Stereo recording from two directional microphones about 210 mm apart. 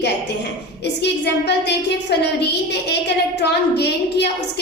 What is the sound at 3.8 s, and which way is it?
Speech, 55° left (ahead or behind).